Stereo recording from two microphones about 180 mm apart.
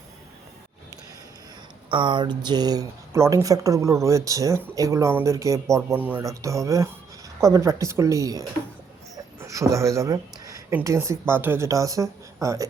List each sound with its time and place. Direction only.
1.9 s speech: 25° right (ahead or behind)